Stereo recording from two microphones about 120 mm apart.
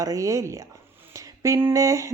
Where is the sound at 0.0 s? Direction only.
30° right (ahead or behind).